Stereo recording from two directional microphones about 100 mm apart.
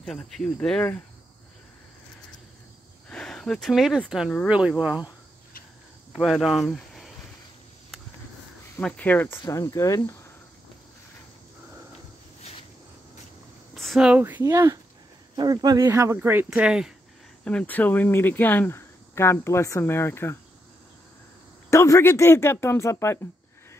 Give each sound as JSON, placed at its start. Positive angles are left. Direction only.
{"t": 0.0, "sound": "speech", "side_deg": 5}
{"t": 3.1, "sound": "speech", "side_deg": 5}
{"t": 6.1, "sound": "speech", "side_deg": 0}
{"t": 8.8, "sound": "speech", "side_deg": 15}
{"t": 9.5, "sound": "speech", "side_deg": 30}
{"t": 13.7, "sound": "a sound", "side_deg": 0}
{"t": 14.4, "sound": "speech", "side_deg": -30}
{"t": 15.3, "sound": "speech", "side_deg": -45}
{"t": 16.2, "sound": "speech", "side_deg": -20}
{"t": 16.4, "sound": "speech", "side_deg": -5}
{"t": 17.5, "sound": "speech", "side_deg": 15}
{"t": 21.6, "sound": "speech", "side_deg": 30}